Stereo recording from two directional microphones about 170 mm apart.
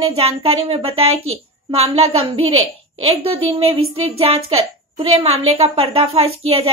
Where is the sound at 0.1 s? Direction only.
35° right (ahead or behind).